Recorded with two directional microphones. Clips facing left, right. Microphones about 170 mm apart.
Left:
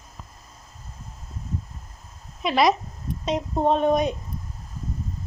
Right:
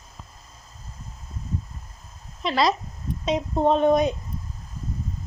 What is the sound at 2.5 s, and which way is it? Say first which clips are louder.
Speech: left 2 dB; 20° left (ahead or behind).